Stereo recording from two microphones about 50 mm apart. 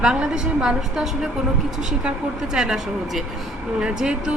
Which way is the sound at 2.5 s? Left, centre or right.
Centre.